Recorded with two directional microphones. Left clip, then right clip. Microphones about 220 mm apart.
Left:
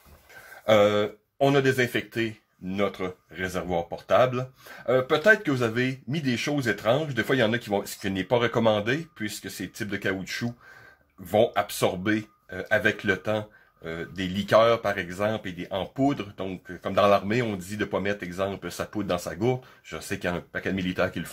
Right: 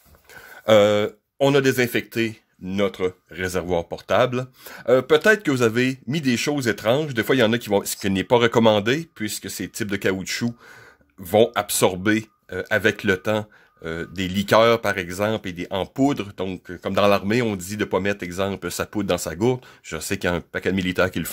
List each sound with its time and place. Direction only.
0.7 s speech: 50° right (ahead or behind)